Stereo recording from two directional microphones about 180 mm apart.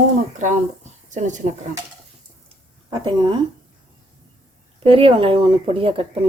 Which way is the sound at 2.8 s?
25° right (ahead or behind).